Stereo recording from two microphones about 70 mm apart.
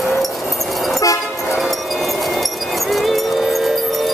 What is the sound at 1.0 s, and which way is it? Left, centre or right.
Vehicle, left.